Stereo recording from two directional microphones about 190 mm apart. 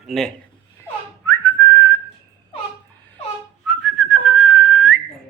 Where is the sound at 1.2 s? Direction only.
15° left (ahead or behind).